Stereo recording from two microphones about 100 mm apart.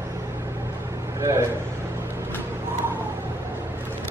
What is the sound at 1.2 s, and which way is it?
Speech, 30° right (ahead or behind).